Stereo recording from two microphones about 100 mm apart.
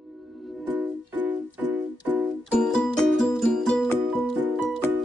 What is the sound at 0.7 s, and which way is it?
Music, 15° right (ahead or behind).